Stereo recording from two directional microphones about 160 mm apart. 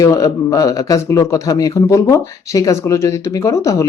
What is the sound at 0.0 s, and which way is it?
Speech, 20° left (ahead or behind).